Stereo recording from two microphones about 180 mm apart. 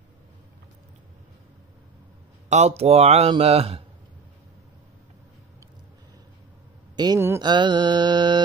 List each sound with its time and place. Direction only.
2.5 s speech: 35° right (ahead or behind)
7.0 s a sound: 20° right (ahead or behind)
7.4 s mantra: 25° right (ahead or behind)